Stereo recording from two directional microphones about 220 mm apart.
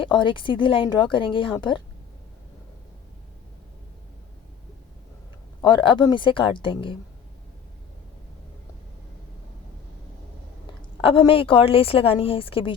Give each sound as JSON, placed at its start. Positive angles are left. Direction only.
{"t": 0.0, "sound": "a woman's voice", "side_deg": 20}
{"t": 5.6, "sound": "a woman's voice", "side_deg": 20}
{"t": 11.0, "sound": "a woman's voice", "side_deg": 25}